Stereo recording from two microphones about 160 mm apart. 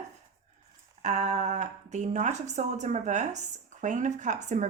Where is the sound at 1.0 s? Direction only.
45° right (ahead or behind).